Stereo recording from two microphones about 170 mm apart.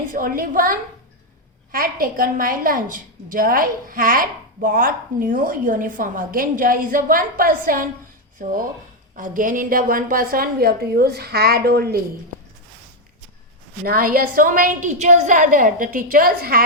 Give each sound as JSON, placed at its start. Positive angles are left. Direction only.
{"t": 0.1, "sound": "a woman's voice", "side_deg": -55}
{"t": 13.8, "sound": "a woman's voice", "side_deg": -60}